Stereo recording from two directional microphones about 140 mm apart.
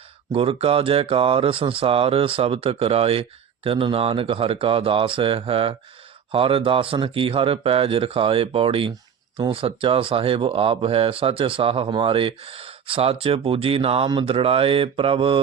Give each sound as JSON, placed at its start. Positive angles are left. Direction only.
{"t": 0.3, "sound": "speech", "side_deg": -45}